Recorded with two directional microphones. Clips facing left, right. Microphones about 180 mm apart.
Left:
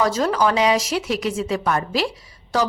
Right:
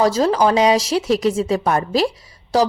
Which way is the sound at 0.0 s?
35° right (ahead or behind).